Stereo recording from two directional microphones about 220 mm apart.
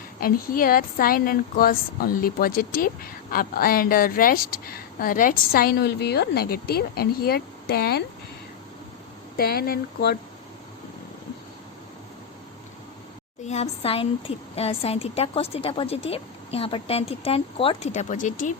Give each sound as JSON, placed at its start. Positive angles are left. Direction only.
{"t": 0.2, "sound": "a woman's voice", "side_deg": 40}
{"t": 9.4, "sound": "a woman's voice", "side_deg": 45}
{"t": 13.4, "sound": "a woman's voice", "side_deg": 30}